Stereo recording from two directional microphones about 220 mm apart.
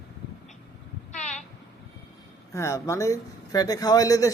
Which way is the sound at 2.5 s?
15° left (ahead or behind).